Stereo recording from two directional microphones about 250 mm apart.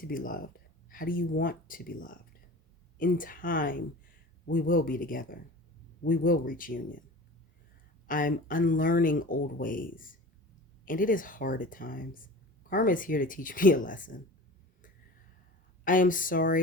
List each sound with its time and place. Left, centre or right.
0.0 s speech: left
8.0 s speech: left
15.8 s speech: left